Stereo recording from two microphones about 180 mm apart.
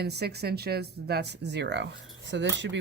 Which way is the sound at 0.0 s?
65° right (ahead or behind).